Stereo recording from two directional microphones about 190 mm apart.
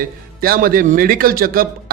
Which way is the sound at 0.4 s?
50° right (ahead or behind).